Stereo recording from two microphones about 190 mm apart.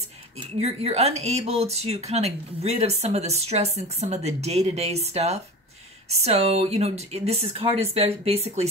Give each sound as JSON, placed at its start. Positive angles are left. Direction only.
{"t": 0.4, "sound": "speech", "side_deg": -35}